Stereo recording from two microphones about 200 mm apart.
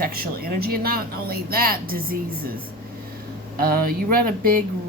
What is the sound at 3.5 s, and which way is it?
A woman's voice, 45° right (ahead or behind).